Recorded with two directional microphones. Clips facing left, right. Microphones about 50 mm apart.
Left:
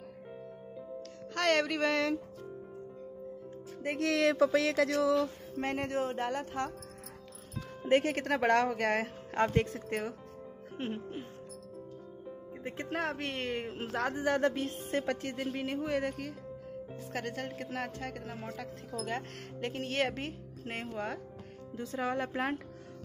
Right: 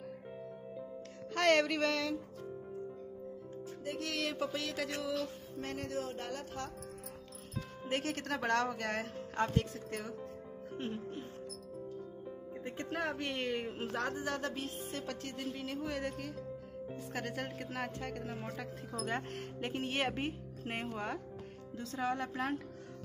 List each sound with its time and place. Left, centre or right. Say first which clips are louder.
1.3 s speech: even; centre
3.8 s music: left 8 dB; left
4.1 s a sound: left 12 dB; left
5.7 s speech: left 6 dB; left
8.1 s speech: left 6 dB; left
9.6 s speech: left 5 dB; left
12.5 s music: left 3 dB; centre
12.8 s speech: left 2 dB; centre
14.1 s speech: left 8 dB; left
16.9 s speech: left 2 dB; centre
21.7 s speech: left 3 dB; centre
22.2 s speech: left 3 dB; left